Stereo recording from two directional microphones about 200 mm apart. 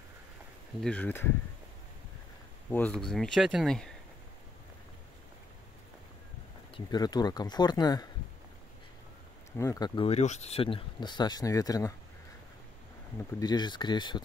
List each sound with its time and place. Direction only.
0.8 s speech: 10° left (ahead or behind)
2.7 s speech: 5° left (ahead or behind)
6.9 s speech: 20° left (ahead or behind)
9.6 s speech: 20° left (ahead or behind)
13.4 s speech: 20° left (ahead or behind)